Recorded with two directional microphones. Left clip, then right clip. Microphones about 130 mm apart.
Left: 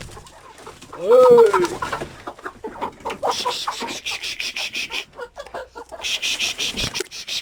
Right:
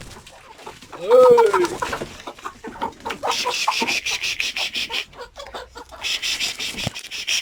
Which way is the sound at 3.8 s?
15° right (ahead or behind).